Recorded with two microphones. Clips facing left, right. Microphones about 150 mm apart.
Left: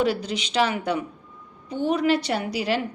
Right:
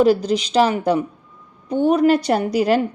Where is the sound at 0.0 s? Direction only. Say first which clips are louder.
Right 9 dB; 40° right (ahead or behind).